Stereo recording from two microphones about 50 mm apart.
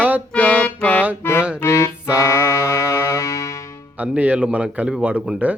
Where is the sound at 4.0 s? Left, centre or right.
Right.